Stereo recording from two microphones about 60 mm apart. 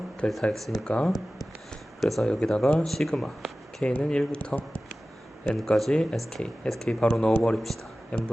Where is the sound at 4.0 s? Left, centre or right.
Centre.